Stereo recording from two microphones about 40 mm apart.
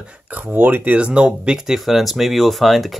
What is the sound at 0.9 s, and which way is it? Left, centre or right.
Speech, right.